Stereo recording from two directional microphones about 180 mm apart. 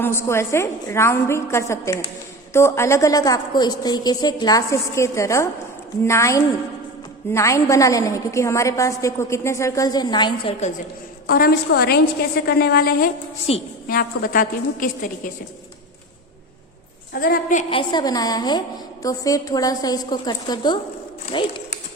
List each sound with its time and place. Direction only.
0.0 s a woman's voice: 15° left (ahead or behind)
11.3 s a woman's voice: 55° left (ahead or behind)
13.5 s a woman's voice: 35° left (ahead or behind)
13.8 s a woman's voice: 55° left (ahead or behind)
17.2 s a woman's voice: 55° left (ahead or behind)
17.7 s a woman's voice: 25° left (ahead or behind)